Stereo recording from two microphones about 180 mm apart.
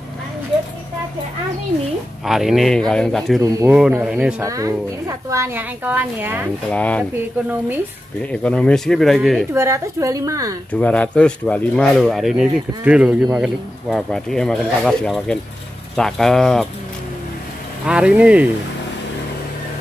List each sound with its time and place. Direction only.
2.2 s speech: centre (ahead or behind)
3.4 s speech: 20° right (ahead or behind)
3.7 s speech: 5° right (ahead or behind)
4.4 s a woman's voice: 20° right (ahead or behind)
6.7 s speech: 5° left (ahead or behind)
8.2 s speech: 5° left (ahead or behind)
9.5 s a woman's voice: 15° right (ahead or behind)
10.7 s speech: 5° left (ahead or behind)
17.8 s a woman's voice: 5° right (ahead or behind)